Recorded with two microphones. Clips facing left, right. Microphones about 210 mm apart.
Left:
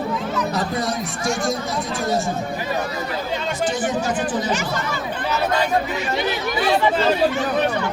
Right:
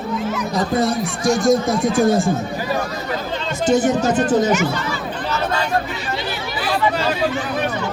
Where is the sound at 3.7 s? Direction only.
45° right (ahead or behind).